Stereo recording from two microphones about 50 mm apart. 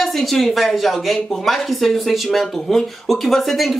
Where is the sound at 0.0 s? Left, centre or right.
Centre.